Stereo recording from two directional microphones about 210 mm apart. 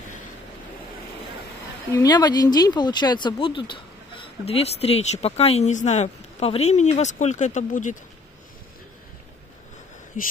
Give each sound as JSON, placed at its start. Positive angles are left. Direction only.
{"t": 2.0, "sound": "speech", "side_deg": 20}